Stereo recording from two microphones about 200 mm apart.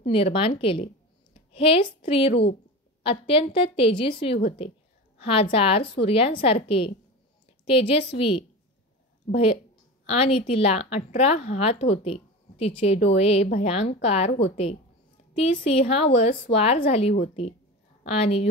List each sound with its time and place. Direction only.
0.0 s a woman's voice: 30° left (ahead or behind)
15.6 s a woman's voice: 30° left (ahead or behind)